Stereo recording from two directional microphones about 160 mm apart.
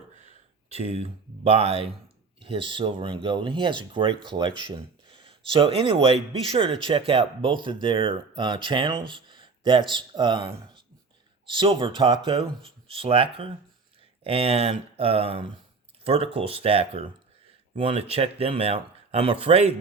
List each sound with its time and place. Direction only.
0.7 s speech: 40° right (ahead or behind)